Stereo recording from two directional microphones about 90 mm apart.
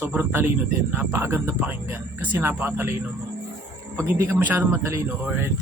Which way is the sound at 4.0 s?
25° right (ahead or behind).